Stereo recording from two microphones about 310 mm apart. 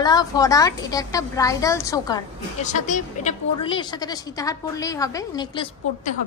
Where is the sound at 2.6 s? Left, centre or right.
Left.